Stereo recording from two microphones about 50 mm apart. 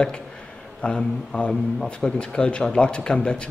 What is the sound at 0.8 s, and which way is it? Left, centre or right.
A man's voice, left.